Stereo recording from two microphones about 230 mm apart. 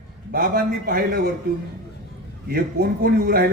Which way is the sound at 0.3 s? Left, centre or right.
Right.